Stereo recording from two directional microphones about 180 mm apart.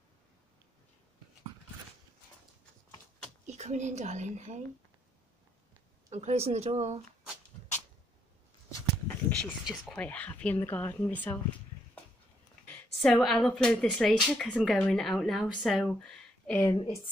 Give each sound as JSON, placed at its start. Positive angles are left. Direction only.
{"t": 3.4, "sound": "a woman's voice", "side_deg": -40}
{"t": 6.0, "sound": "speech", "side_deg": -40}
{"t": 9.4, "sound": "a woman's voice", "side_deg": 5}
{"t": 12.6, "sound": "speech", "side_deg": 5}
{"t": 16.7, "sound": "a woman's voice", "side_deg": 25}